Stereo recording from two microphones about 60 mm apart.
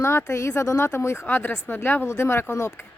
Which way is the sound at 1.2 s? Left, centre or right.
Left.